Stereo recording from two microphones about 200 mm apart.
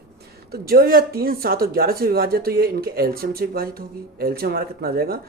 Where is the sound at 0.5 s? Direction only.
50° right (ahead or behind).